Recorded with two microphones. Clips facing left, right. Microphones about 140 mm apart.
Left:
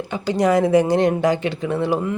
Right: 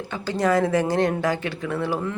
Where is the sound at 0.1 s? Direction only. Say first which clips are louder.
Left 4 dB; 15° left (ahead or behind).